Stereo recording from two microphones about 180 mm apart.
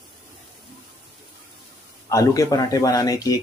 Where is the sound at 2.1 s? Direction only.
20° left (ahead or behind).